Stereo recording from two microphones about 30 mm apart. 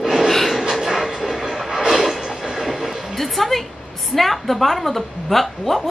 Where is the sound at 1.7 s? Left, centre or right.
Right.